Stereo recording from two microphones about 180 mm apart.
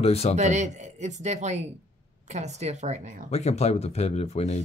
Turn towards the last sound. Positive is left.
turn(degrees=35)  # may be behind; listen again after turning